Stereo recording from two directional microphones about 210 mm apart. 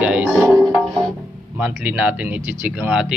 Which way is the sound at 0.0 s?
5° right (ahead or behind).